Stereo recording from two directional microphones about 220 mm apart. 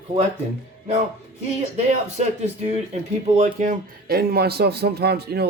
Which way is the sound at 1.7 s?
30° right (ahead or behind).